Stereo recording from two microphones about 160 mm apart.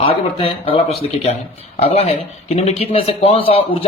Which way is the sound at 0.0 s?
35° left (ahead or behind).